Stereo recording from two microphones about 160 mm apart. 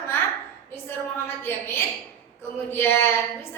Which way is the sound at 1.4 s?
15° left (ahead or behind).